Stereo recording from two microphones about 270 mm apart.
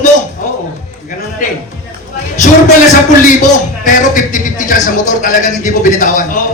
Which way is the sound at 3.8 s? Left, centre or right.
Left.